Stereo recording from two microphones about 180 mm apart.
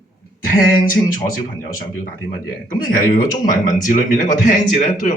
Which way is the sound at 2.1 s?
50° left (ahead or behind).